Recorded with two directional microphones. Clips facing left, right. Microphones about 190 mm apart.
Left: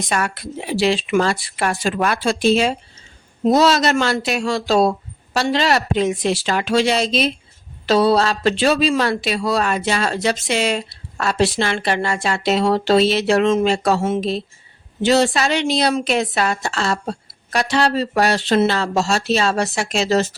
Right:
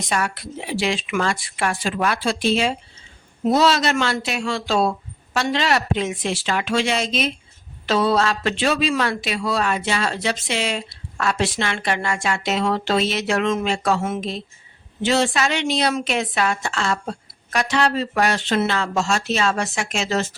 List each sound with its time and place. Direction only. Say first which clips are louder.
0.1 s speech: even; 45° left (ahead or behind)